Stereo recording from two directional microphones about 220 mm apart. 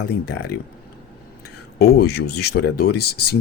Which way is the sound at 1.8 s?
45° left (ahead or behind).